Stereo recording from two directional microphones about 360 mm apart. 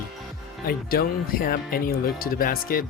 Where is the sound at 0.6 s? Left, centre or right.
Left.